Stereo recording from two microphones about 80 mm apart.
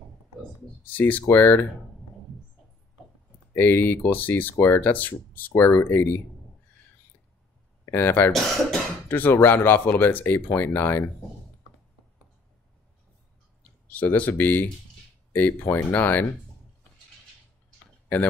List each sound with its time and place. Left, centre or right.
0.8 s speech: left
3.5 s speech: left
7.8 s speech: left
8.3 s speech: centre
9.1 s speech: left
13.8 s speech: centre
18.0 s speech: left